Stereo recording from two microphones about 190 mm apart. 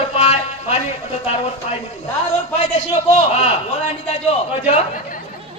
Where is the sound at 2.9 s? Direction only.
35° left (ahead or behind).